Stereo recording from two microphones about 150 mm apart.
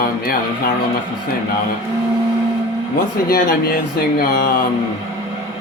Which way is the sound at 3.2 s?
75° left (ahead or behind).